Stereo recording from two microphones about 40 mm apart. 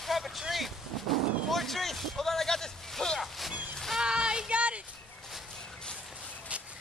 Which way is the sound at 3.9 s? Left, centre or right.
Right.